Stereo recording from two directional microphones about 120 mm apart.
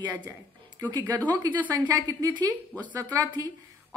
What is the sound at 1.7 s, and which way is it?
Speech, 35° right (ahead or behind).